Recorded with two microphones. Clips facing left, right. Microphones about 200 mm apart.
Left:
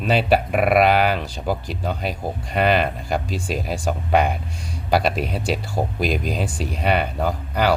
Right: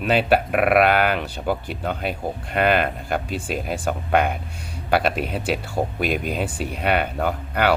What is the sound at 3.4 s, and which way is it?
Speech, centre (ahead or behind).